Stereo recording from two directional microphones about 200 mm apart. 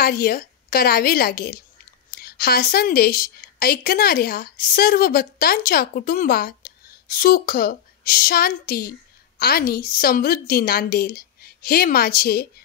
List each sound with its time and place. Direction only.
0.0 s a woman's voice: 50° left (ahead or behind)